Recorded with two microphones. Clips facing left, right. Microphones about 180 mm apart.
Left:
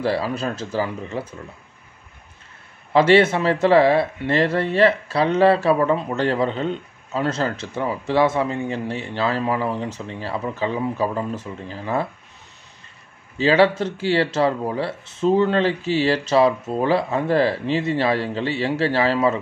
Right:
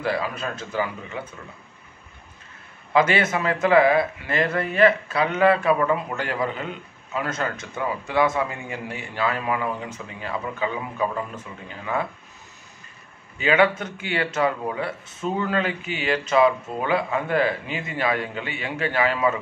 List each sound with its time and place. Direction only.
0.0 s speech: 30° left (ahead or behind)
2.9 s speech: 30° left (ahead or behind)
13.4 s speech: 30° left (ahead or behind)